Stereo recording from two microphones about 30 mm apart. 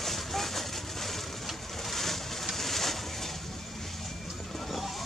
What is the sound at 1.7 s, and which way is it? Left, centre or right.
Boat, centre.